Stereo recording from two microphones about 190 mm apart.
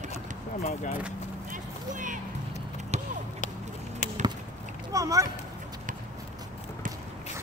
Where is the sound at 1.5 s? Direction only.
45° right (ahead or behind).